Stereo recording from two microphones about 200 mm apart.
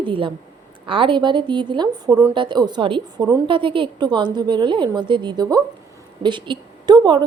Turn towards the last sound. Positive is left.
turn(degrees=-20)  # may be behind; listen again after turning